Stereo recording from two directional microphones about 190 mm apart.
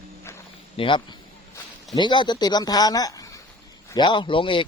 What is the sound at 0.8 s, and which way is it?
Speech, 25° left (ahead or behind).